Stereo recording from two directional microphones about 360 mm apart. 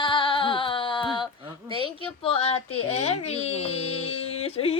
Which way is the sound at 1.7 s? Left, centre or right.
Centre.